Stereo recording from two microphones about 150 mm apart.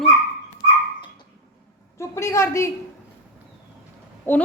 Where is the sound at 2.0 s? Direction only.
20° left (ahead or behind).